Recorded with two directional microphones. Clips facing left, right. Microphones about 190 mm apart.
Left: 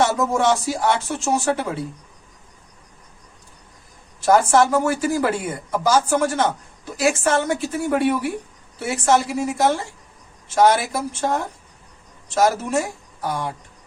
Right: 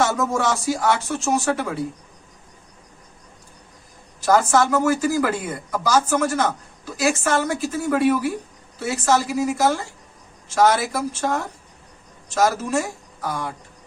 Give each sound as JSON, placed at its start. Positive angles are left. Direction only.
{"t": 0.0, "sound": "speech", "side_deg": 25}
{"t": 4.3, "sound": "speech", "side_deg": 30}